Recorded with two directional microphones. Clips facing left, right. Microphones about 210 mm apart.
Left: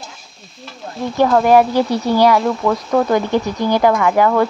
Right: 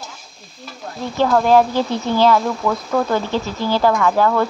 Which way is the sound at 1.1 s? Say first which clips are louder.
Left 2 dB; 10° left (ahead or behind).